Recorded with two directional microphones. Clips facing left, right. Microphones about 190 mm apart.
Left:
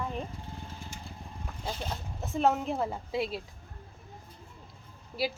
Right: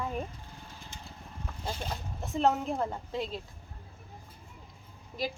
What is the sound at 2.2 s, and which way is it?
A woman's voice, centre (ahead or behind).